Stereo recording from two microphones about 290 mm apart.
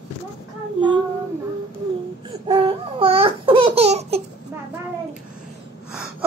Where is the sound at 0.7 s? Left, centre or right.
Centre.